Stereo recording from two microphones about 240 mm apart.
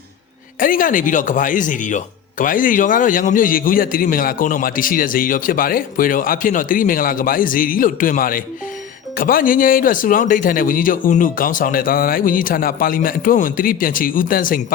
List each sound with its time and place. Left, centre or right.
0.6 s a man's voice: left